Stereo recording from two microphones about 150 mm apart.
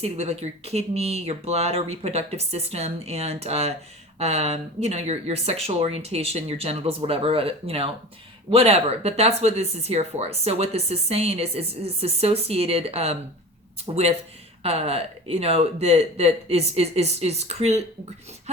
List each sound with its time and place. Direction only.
0.0 s speech: 45° right (ahead or behind)